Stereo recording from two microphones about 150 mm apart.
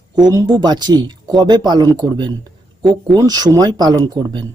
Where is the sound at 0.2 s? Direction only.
25° right (ahead or behind).